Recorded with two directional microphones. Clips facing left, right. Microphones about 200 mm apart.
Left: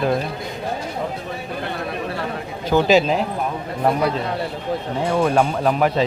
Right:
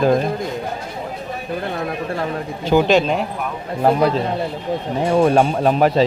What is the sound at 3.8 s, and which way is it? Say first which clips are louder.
Speech: right 3 dB; 30° right (ahead or behind).